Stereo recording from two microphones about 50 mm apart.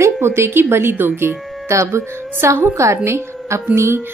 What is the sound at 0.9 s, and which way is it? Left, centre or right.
Speech, right.